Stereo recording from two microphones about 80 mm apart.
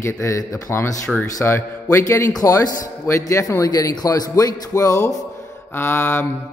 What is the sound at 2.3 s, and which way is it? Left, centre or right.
A man's voice, left.